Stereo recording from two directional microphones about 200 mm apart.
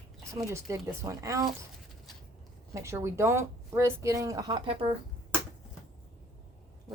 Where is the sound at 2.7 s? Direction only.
15° right (ahead or behind).